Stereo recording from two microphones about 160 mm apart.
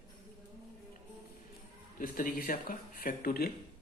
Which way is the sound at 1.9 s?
60° left (ahead or behind).